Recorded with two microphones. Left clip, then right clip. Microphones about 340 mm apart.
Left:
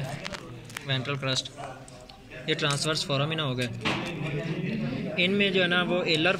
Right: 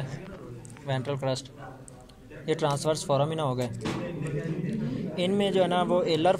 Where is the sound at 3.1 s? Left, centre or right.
Right.